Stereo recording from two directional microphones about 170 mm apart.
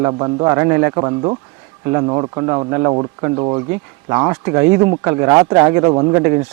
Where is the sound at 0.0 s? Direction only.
25° right (ahead or behind).